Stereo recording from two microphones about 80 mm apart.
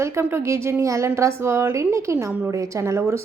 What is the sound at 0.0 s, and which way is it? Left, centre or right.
Speech, right.